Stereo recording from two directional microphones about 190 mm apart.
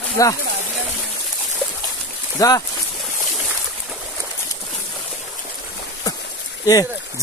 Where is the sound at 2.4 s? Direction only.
20° left (ahead or behind).